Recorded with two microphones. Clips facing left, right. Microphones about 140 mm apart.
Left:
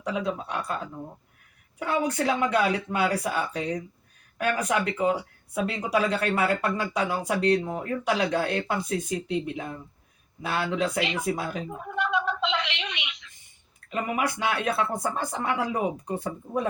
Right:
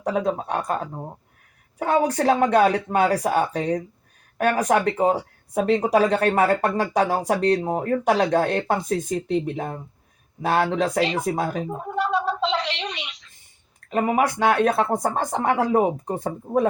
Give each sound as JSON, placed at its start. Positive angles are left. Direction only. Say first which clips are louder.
{"t": 0.0, "sound": "speech", "louder": "right 6 dB", "side_deg": -45}
{"t": 10.8, "sound": "a sound", "louder": "right 5 dB", "side_deg": -40}
{"t": 13.9, "sound": "speech", "louder": "right 7 dB", "side_deg": -45}
{"t": 16.0, "sound": "speech", "louder": "right 4 dB", "side_deg": -40}